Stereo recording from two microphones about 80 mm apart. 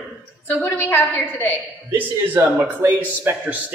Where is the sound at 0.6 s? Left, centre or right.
Left.